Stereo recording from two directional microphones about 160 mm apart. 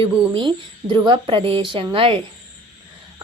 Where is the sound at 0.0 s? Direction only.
30° right (ahead or behind).